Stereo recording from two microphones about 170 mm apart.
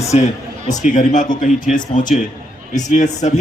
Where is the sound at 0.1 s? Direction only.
40° left (ahead or behind).